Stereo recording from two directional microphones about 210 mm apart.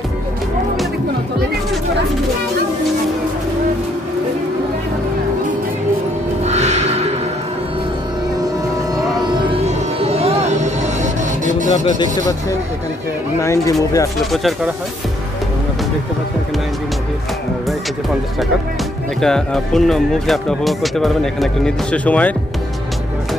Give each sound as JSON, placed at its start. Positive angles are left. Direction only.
{"t": 6.4, "sound": "music", "side_deg": -30}
{"t": 8.9, "sound": "music", "side_deg": -20}
{"t": 12.0, "sound": "speech", "side_deg": 15}
{"t": 14.3, "sound": "speech", "side_deg": 0}
{"t": 19.2, "sound": "speech", "side_deg": 0}